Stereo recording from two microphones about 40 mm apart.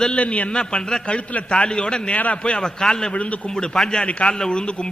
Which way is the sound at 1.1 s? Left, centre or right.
Left.